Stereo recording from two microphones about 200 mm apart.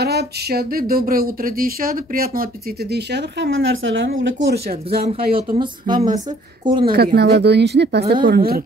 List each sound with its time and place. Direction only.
0.0 s speech: 55° right (ahead or behind)
6.1 s a woman's voice: 25° right (ahead or behind)
6.8 s speech: 50° right (ahead or behind)